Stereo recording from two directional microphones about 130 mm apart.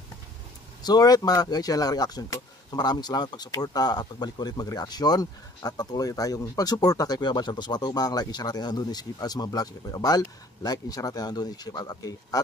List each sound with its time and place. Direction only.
0.8 s speech: 30° left (ahead or behind)